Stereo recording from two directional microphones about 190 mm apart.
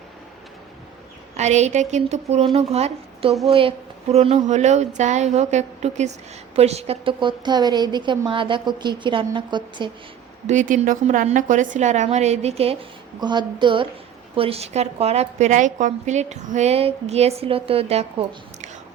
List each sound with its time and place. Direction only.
1.4 s a woman's voice: 35° right (ahead or behind)
10.4 s a woman's voice: 40° right (ahead or behind)